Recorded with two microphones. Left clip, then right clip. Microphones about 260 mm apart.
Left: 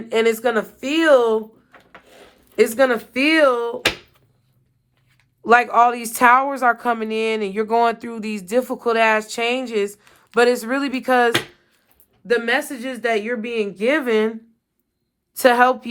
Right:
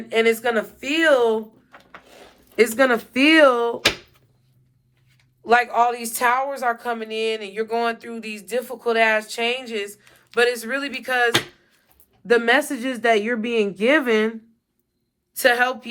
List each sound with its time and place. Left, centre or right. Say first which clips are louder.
0.1 s a man's voice: left 1 dB; left
1.7 s drawer open or close: right 1 dB; centre
2.6 s a woman's voice: left 1 dB; centre
5.5 s a man's voice: left 4 dB; left
12.3 s a woman's voice: right 2 dB; centre
15.4 s a man's voice: left 4 dB; centre